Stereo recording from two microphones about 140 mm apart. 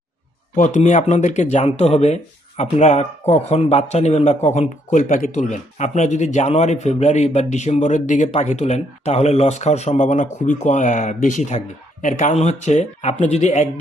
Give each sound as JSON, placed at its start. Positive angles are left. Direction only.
{"t": 0.5, "sound": "speech", "side_deg": 60}